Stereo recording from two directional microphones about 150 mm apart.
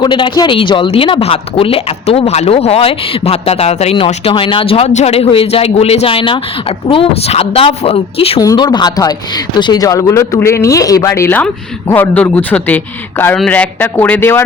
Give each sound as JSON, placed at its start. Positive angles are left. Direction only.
{"t": 0.0, "sound": "a woman's voice", "side_deg": 30}
{"t": 8.4, "sound": "speech", "side_deg": 25}